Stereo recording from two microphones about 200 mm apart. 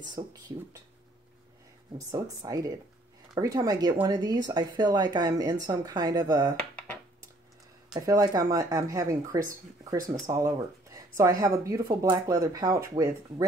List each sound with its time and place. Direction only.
0.0 s speech: 20° right (ahead or behind)
2.0 s speech: 15° right (ahead or behind)
6.5 s dishes: 5° left (ahead or behind)
7.9 s speech: 20° right (ahead or behind)